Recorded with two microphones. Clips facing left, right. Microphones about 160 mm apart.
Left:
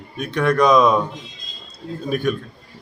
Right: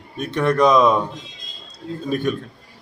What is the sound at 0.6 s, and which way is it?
Speech, 5° right (ahead or behind).